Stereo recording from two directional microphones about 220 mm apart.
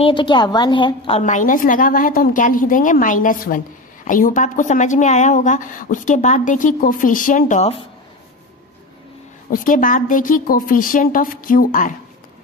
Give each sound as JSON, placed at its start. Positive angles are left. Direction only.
{"t": 0.0, "sound": "a woman's voice", "side_deg": 20}
{"t": 9.5, "sound": "a woman's voice", "side_deg": 40}